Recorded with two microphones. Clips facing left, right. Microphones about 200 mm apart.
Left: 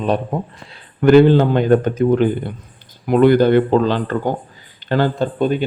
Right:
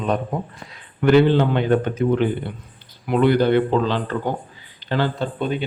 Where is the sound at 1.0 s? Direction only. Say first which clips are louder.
Left 5 dB; 45° left (ahead or behind).